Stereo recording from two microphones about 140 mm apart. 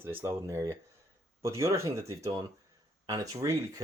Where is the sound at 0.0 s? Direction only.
15° right (ahead or behind).